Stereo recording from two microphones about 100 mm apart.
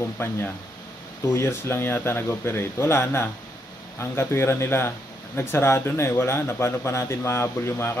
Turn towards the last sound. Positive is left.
turn(degrees=25)  # may be behind; listen again after turning